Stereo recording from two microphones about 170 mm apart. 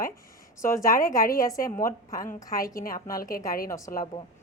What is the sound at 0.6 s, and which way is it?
A woman's voice, 20° left (ahead or behind).